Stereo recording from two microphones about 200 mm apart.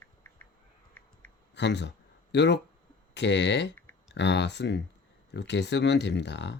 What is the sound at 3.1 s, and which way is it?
Speech, 60° left (ahead or behind).